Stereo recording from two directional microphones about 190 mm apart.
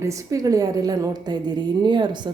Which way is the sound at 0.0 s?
15° right (ahead or behind).